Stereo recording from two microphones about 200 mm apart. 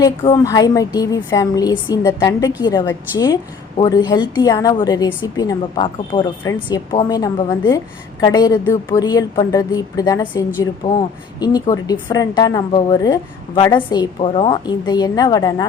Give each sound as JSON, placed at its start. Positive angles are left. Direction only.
{"t": 0.0, "sound": "a woman's voice", "side_deg": 20}